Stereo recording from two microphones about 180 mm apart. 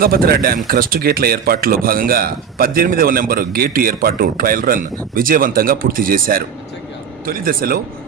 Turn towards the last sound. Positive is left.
turn(degrees=-55)  # may be behind; listen again after turning